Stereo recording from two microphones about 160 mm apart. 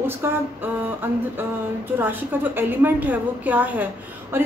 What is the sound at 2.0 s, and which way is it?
A woman's voice, 10° right (ahead or behind).